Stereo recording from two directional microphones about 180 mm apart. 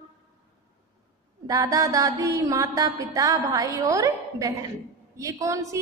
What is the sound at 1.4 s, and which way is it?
Music, 20° right (ahead or behind).